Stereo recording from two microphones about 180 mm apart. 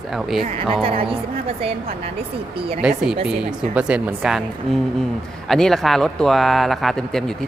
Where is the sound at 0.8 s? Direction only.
30° right (ahead or behind).